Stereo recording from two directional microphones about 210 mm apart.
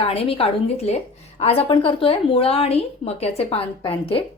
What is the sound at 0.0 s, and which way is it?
A woman's voice, 25° left (ahead or behind).